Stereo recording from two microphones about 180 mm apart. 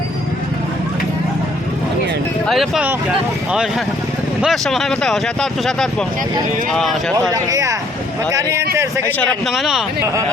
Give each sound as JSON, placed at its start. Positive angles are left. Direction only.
{"t": 2.5, "sound": "speech", "side_deg": 0}
{"t": 7.1, "sound": "speech", "side_deg": -20}
{"t": 9.0, "sound": "a man's voice", "side_deg": 10}
{"t": 9.5, "sound": "speech", "side_deg": 0}